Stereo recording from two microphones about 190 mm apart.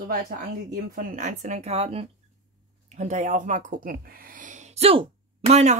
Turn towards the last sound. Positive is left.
turn(degrees=-35)  # may be behind; listen again after turning